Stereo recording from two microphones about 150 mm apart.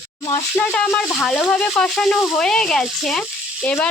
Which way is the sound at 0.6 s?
5° left (ahead or behind).